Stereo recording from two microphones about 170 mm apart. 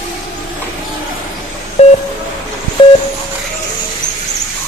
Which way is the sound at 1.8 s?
40° left (ahead or behind).